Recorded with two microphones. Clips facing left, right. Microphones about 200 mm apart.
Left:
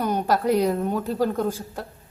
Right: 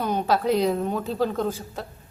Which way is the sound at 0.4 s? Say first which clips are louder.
Left 1 dB; 10° left (ahead or behind).